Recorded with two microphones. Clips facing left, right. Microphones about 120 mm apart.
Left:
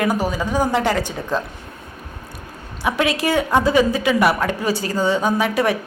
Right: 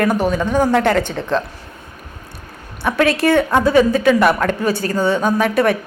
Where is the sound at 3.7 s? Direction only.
50° right (ahead or behind).